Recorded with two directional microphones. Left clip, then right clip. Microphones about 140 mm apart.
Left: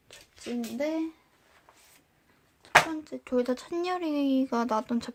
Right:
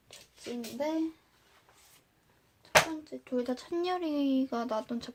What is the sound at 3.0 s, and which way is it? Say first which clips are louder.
Speech: left 5 dB; 35° left (ahead or behind).